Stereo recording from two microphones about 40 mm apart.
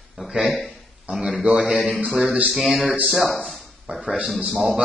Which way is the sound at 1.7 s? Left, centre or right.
Centre.